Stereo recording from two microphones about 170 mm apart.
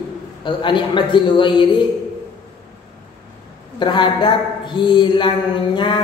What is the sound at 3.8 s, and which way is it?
Speech, 25° left (ahead or behind).